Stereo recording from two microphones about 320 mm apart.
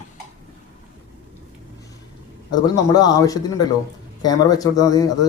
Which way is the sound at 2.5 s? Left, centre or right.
Centre.